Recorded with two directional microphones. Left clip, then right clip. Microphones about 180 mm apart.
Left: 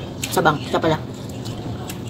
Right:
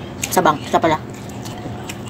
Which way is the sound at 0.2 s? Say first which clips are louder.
Right 3 dB; 15° right (ahead or behind).